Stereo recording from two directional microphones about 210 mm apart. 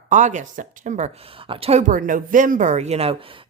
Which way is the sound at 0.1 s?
35° right (ahead or behind).